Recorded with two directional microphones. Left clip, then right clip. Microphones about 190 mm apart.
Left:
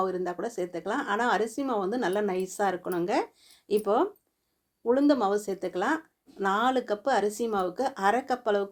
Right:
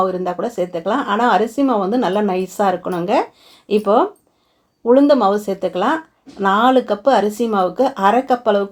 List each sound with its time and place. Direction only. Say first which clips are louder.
0.0 s speech: right 11 dB; 30° left (ahead or behind)